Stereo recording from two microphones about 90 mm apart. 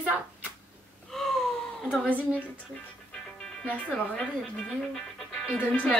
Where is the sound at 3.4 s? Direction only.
15° left (ahead or behind).